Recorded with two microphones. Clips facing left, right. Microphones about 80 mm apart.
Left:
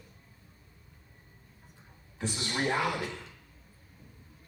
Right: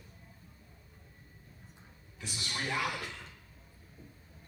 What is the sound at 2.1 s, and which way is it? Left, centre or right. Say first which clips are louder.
Speech: left 7 dB; left.